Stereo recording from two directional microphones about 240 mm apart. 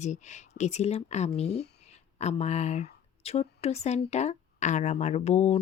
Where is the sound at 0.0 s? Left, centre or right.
Left.